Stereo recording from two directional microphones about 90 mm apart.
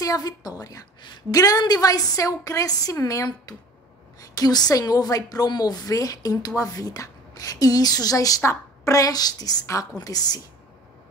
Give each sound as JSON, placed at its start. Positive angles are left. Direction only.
{"t": 0.0, "sound": "a woman's voice", "side_deg": 40}
{"t": 8.4, "sound": "a woman's voice", "side_deg": 30}